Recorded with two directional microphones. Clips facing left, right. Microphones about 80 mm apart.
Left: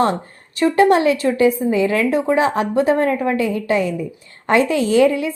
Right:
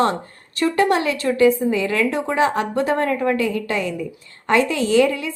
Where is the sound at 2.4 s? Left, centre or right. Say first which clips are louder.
Left 2 dB; left.